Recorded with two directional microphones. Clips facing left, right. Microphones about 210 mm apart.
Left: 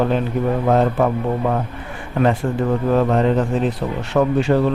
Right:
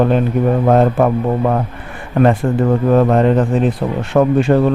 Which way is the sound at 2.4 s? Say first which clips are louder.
Right 5 dB; 45° right (ahead or behind).